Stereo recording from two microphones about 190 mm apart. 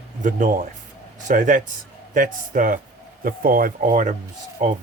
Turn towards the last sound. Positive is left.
turn(degrees=-40)  # may be behind; listen again after turning